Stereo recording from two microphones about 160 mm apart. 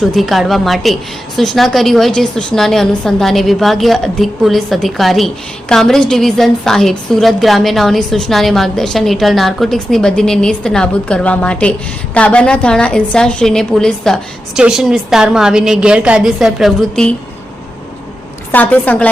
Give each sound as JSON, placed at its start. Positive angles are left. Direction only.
{"t": 0.0, "sound": "a woman's voice", "side_deg": 0}
{"t": 18.5, "sound": "a woman's voice", "side_deg": 10}